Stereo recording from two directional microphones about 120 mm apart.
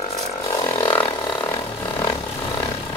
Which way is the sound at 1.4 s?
20° left (ahead or behind).